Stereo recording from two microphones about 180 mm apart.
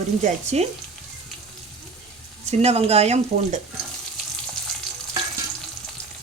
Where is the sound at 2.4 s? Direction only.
35° right (ahead or behind).